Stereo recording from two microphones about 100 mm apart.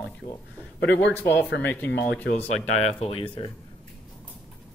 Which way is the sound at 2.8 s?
80° left.